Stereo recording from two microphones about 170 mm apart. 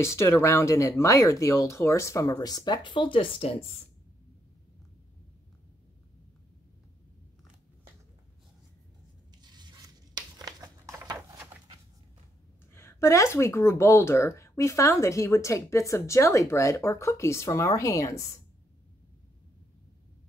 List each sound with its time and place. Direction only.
0.0 s speech: 15° left (ahead or behind); by 3.5 s 30° left (ahead or behind)
9.4 s tearing: 25° right (ahead or behind)
12.7 s speech: 15° left (ahead or behind)